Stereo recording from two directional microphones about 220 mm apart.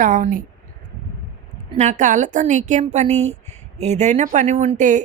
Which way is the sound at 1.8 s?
35° right (ahead or behind).